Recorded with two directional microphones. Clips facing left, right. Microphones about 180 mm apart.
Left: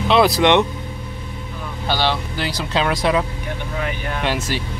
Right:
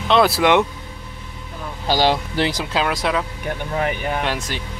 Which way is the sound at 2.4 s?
20° right (ahead or behind).